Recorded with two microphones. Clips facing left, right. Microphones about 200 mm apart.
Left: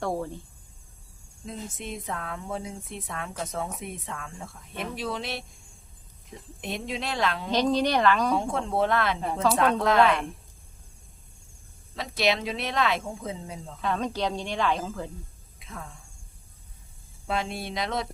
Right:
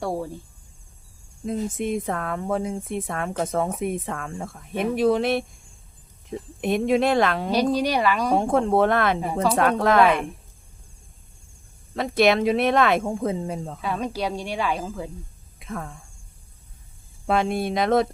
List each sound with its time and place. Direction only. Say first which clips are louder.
0.0 s cricket: right 2 dB; 10° right (ahead or behind)
1.5 s speech: right 11 dB; 55° right (ahead or behind)
6.6 s speech: right 13 dB; 55° right (ahead or behind)
7.5 s a woman's voice: even; 10° right (ahead or behind)
8.3 s speech: right 7 dB; 55° right (ahead or behind)
11.9 s speech: right 7 dB; 55° right (ahead or behind)
13.8 s a woman's voice: even; 10° right (ahead or behind)
15.5 s a sound: right 9 dB; 55° right (ahead or behind)
17.2 s speech: right 8 dB; 55° right (ahead or behind)